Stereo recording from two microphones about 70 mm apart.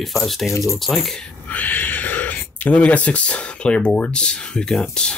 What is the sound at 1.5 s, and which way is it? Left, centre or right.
Speech, left.